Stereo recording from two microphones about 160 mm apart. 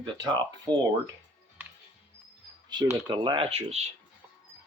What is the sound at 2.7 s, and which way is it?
Speech, 30° right (ahead or behind).